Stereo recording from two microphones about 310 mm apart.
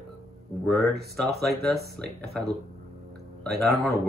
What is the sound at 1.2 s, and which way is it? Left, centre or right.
Speech, centre.